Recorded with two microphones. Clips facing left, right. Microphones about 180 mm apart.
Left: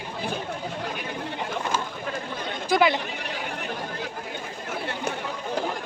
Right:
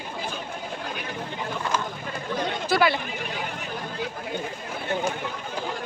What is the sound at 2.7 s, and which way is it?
Speech, 20° left (ahead or behind).